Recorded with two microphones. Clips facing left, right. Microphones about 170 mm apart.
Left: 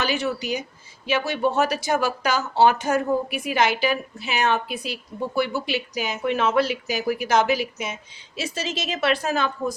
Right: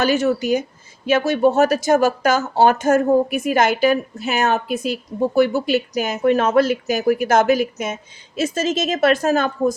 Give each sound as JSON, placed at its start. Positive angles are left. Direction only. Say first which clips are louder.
{"t": 0.0, "sound": "speech", "louder": "right 7 dB", "side_deg": -45}